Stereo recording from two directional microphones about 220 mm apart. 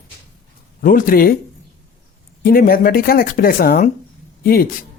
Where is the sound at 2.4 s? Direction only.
40° left (ahead or behind).